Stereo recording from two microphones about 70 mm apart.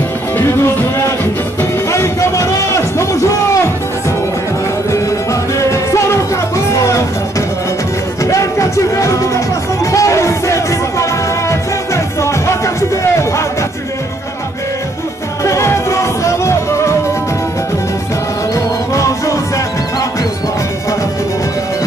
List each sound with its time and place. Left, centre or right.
0.4 s music: left
5.3 s music: left
8.2 s music: left
15.4 s music: left
18.5 s music: left